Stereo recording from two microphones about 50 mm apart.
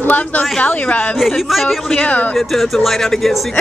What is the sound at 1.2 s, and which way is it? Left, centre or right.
Speech, centre.